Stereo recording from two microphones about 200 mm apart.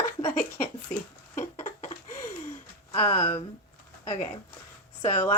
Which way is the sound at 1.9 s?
20° left (ahead or behind).